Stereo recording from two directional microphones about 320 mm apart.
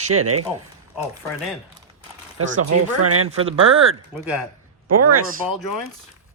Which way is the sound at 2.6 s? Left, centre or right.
Right.